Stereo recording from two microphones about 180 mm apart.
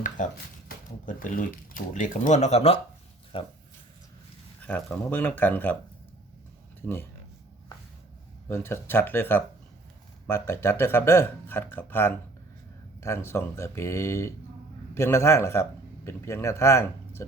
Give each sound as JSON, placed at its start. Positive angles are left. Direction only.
{"t": 0.2, "sound": "speech", "side_deg": 45}
{"t": 4.6, "sound": "speech", "side_deg": 10}
{"t": 6.8, "sound": "speech", "side_deg": 15}
{"t": 8.4, "sound": "speech", "side_deg": 15}